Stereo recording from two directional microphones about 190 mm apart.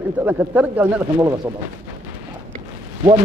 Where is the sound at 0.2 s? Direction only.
10° right (ahead or behind).